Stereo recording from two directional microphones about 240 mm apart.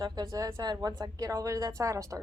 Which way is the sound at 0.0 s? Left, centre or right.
Centre.